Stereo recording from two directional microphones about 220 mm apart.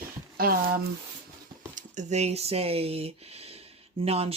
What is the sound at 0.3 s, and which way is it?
Speech, 40° right (ahead or behind).